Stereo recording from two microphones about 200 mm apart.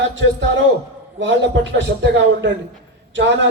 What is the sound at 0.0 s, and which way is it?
A man's voice, 65° right (ahead or behind).